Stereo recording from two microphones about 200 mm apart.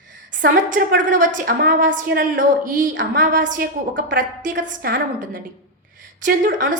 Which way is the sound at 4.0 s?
40° right (ahead or behind).